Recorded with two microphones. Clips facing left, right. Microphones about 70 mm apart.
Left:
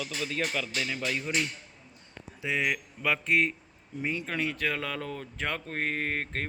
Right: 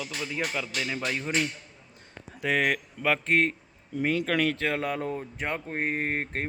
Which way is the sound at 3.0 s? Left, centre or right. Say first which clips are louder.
Right 2 dB; right.